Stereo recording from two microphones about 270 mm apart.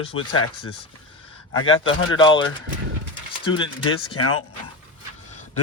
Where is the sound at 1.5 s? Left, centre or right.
Left.